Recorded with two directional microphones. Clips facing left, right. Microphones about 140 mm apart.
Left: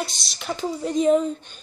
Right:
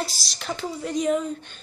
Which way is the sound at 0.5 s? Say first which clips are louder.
Left 4 dB; 25° left (ahead or behind).